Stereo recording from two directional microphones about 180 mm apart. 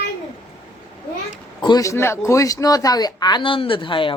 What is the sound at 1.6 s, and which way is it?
Speech, 20° left (ahead or behind).